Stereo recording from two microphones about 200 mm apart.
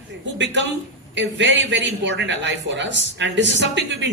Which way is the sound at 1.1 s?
65° right (ahead or behind).